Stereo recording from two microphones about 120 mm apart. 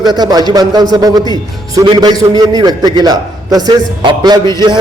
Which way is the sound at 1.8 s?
45° right (ahead or behind).